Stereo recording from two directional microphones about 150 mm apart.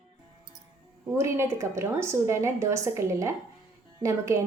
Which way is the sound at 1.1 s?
20° right (ahead or behind).